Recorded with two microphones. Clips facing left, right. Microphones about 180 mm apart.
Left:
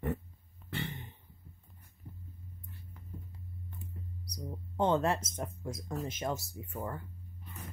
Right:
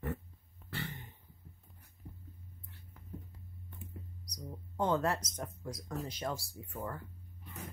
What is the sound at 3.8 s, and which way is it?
Music, 30° left (ahead or behind).